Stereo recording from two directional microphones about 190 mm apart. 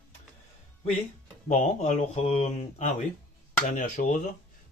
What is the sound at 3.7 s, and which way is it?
Speech, 40° left (ahead or behind).